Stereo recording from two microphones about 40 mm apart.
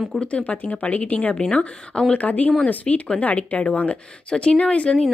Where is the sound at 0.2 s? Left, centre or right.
Left.